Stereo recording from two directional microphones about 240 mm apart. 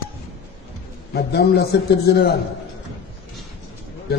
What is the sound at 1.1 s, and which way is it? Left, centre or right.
Speech, left.